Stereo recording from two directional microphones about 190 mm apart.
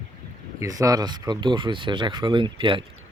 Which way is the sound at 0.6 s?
20° right (ahead or behind).